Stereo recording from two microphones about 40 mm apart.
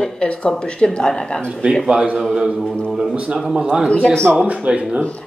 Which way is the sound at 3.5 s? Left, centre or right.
Right.